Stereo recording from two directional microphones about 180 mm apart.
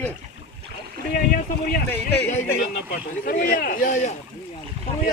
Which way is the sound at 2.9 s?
50° left (ahead or behind).